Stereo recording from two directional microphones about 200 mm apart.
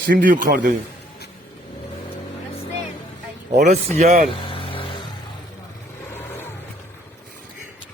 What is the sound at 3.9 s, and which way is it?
Speech, 35° right (ahead or behind).